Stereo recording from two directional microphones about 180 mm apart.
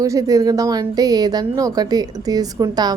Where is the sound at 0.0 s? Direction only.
20° right (ahead or behind).